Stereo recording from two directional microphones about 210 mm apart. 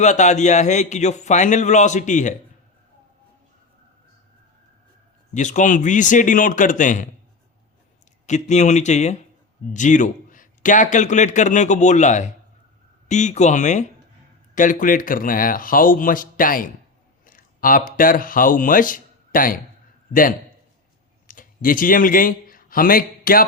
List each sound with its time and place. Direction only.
0.0 s a man's voice: 35° left (ahead or behind)
5.3 s a man's voice: 35° left (ahead or behind)
8.3 s a man's voice: 35° left (ahead or behind)
21.2 s speech: 40° left (ahead or behind)